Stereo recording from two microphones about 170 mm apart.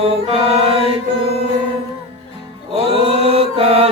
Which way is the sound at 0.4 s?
35° right (ahead or behind).